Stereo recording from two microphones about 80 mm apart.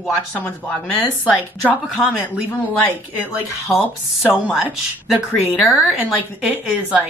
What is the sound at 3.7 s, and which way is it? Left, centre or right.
Speech, centre.